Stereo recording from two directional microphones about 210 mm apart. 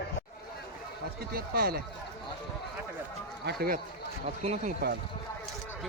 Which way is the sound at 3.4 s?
50° right (ahead or behind).